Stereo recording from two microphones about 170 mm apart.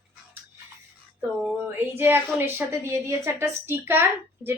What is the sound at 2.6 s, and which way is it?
A woman's voice, 15° right (ahead or behind).